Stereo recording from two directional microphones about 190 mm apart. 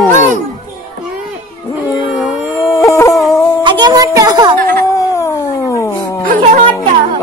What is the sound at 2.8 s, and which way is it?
Howl, 15° left (ahead or behind).